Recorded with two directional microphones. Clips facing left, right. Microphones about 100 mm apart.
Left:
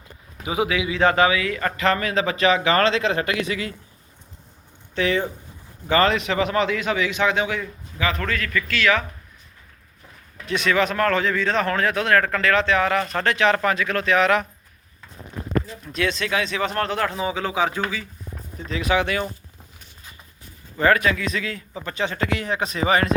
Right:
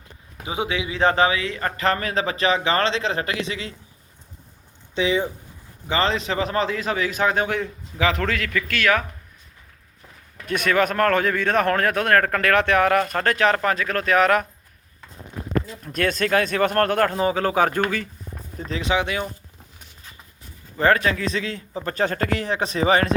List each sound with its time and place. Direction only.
0.4 s a man's voice: 30° right (ahead or behind)
4.9 s a man's voice: 15° right (ahead or behind); by 9.0 s 50° right (ahead or behind)
10.4 s speech: 50° right (ahead or behind)
15.8 s speech: 50° right (ahead or behind)
18.6 s a man's voice: 30° right (ahead or behind)
20.7 s a man's voice: 35° right (ahead or behind)